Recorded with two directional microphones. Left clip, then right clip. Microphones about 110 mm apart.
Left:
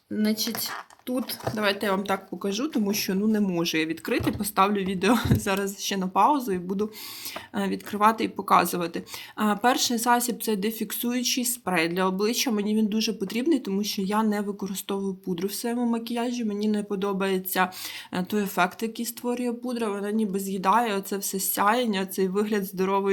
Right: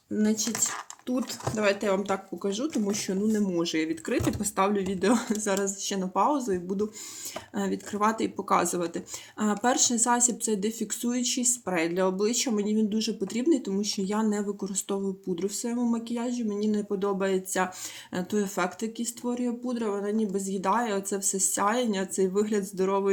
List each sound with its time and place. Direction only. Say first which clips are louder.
0.1 s speech: left 1 dB; 5° left (ahead or behind)
1.5 s speech: even; 15° left (ahead or behind)